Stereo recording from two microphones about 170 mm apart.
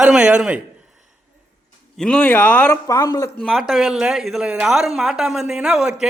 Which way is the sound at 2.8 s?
20° left (ahead or behind).